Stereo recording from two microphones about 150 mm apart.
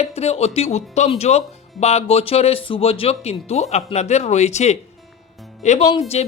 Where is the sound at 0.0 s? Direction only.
45° left (ahead or behind).